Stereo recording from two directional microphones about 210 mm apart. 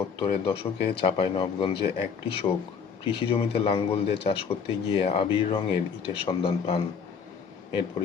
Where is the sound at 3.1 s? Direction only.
25° left (ahead or behind).